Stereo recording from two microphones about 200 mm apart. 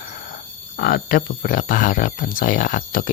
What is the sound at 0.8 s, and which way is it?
Speech, 45° left (ahead or behind).